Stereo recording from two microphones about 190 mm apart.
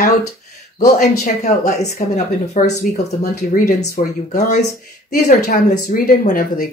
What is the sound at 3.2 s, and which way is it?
Speech, 50° left (ahead or behind).